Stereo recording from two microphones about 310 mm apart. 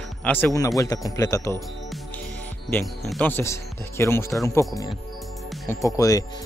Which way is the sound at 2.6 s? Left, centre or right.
Centre.